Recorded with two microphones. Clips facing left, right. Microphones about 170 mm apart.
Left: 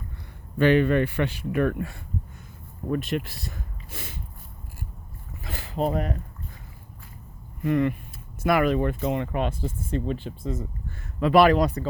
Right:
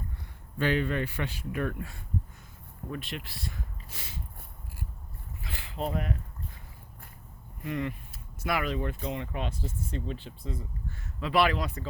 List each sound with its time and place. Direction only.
0.6 s speech: 65° left (ahead or behind)
2.9 s speech: 45° left (ahead or behind)
5.4 s a sound: 45° left (ahead or behind)
7.6 s speech: 55° left (ahead or behind); by 11.9 s 40° left (ahead or behind)